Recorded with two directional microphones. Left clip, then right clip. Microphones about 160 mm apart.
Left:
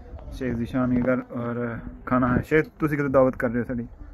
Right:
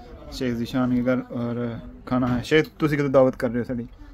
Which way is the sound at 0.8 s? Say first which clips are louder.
Even; 20° right (ahead or behind).